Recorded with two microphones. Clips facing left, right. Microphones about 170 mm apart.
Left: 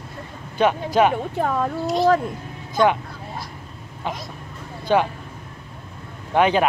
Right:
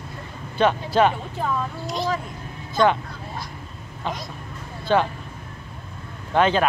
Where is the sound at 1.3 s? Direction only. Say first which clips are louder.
Left 4 dB; 60° left (ahead or behind).